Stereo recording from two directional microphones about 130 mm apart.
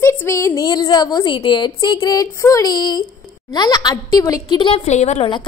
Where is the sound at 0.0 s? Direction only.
20° left (ahead or behind).